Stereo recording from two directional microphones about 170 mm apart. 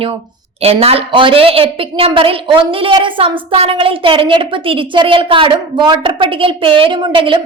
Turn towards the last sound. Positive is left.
turn(degrees=-30)  # may be behind; listen again after turning